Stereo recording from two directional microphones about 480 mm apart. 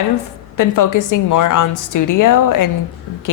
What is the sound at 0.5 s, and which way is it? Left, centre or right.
A woman's voice, left.